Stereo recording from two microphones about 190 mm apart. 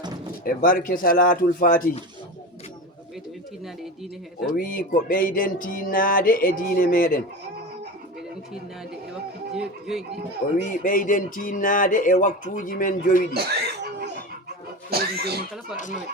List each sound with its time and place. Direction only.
0.4 s music: 50° left (ahead or behind)
4.5 s music: 50° left (ahead or behind)
9.6 s speech: centre (ahead or behind)
10.7 s music: 45° left (ahead or behind)
13.3 s a sound: 55° right (ahead or behind)
14.8 s a sound: 55° right (ahead or behind)